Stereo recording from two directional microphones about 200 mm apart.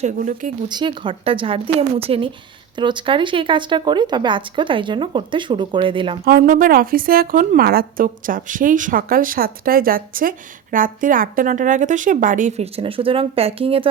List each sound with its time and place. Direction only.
0.0 s speech: 40° right (ahead or behind)
0.7 s speech: 25° right (ahead or behind)
6.2 s a woman's voice: 50° right (ahead or behind); by 13.8 s 30° right (ahead or behind)